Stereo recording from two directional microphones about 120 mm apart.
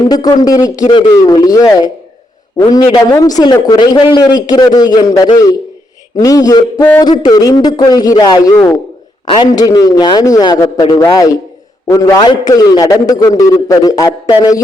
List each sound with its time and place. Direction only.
0.1 s a man's voice: 30° left (ahead or behind)
12.2 s a man's voice: 35° left (ahead or behind)